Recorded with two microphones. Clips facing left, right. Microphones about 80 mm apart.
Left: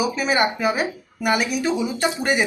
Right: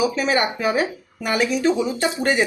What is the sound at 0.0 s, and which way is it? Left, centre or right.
Speech, centre.